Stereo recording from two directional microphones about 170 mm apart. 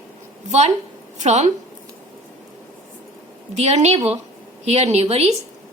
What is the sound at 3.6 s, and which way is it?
Speech, 40° right (ahead or behind).